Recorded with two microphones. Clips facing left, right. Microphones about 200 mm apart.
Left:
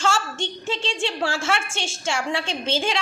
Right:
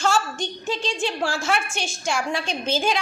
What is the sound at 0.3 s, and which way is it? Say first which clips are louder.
A woman's voice: even; 25° left (ahead or behind).